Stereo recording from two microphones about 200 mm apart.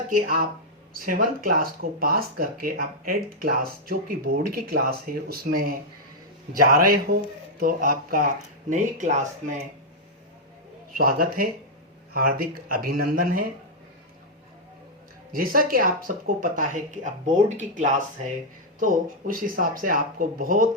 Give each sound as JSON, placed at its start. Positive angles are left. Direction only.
{"t": 0.1, "sound": "speech", "side_deg": -45}
{"t": 10.9, "sound": "speech", "side_deg": -45}
{"t": 15.3, "sound": "speech", "side_deg": -45}